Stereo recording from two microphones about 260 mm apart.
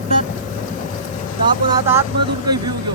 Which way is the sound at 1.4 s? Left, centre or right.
Centre.